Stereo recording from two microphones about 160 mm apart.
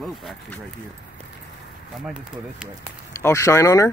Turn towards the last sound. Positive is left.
turn(degrees=20)  # may be behind; listen again after turning